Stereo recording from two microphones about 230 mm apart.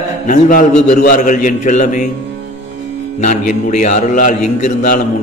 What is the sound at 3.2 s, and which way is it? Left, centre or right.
A man's voice, left.